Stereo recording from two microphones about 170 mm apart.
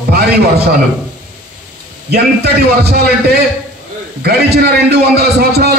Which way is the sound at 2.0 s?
75° right (ahead or behind).